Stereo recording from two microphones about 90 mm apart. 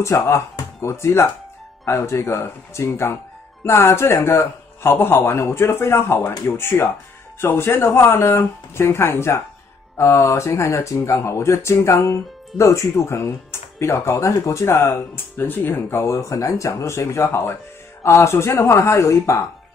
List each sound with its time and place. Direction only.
0.0 s a man's voice: 30° left (ahead or behind)